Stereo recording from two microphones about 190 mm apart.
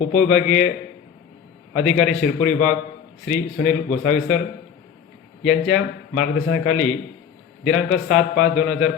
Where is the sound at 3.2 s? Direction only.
40° left (ahead or behind).